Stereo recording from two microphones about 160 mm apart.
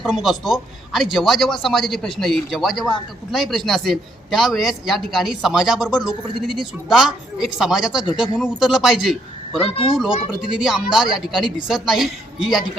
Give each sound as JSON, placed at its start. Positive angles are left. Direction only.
{"t": 0.0, "sound": "a man's voice", "side_deg": 0}
{"t": 9.6, "sound": "speech", "side_deg": 35}
{"t": 10.5, "sound": "a man's voice", "side_deg": -5}